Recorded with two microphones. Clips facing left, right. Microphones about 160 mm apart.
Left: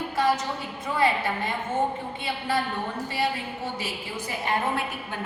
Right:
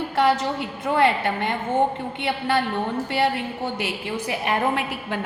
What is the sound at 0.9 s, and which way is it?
A woman's voice, 65° right (ahead or behind).